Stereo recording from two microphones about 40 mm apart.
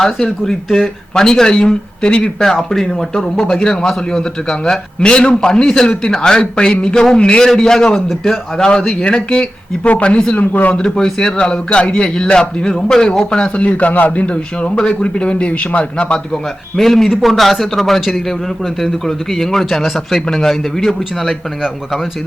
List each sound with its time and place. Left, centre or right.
0.0 s a man's voice: centre
2.6 s a man's voice: centre
7.9 s a man's voice: centre; by 10.3 s left
10.3 s speech: left
10.8 s a man's voice: centre
11.5 s a man's voice: left
13.6 s a man's voice: left
16.7 s a man's voice: centre